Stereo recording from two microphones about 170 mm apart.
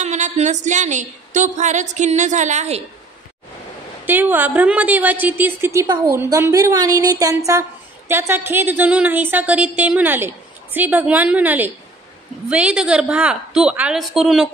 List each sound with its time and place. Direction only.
0.0 s a woman's voice: 45° right (ahead or behind)
4.0 s a woman's voice: 10° right (ahead or behind)